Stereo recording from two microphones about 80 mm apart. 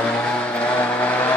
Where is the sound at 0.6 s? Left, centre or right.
Centre.